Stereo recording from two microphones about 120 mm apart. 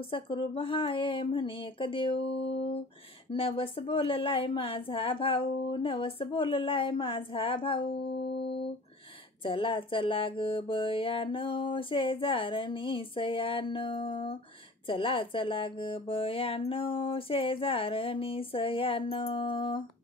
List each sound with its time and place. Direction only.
0.1 s music: 45° left (ahead or behind)
9.4 s music: 45° left (ahead or behind)